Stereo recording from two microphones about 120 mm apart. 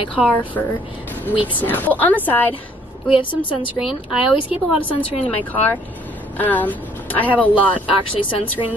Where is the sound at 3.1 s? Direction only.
45° left (ahead or behind).